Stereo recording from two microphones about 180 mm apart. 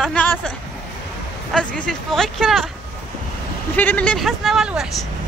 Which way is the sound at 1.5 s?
5° left (ahead or behind).